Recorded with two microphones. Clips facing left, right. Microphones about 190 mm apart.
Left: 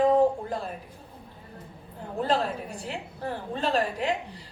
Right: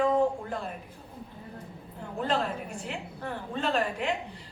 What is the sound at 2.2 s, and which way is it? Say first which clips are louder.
A woman's voice: left 2 dB; 35° left (ahead or behind).